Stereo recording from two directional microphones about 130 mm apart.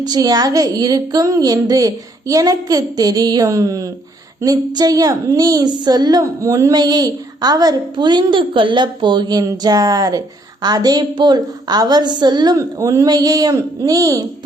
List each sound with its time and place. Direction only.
0.0 s a woman's voice: 30° right (ahead or behind)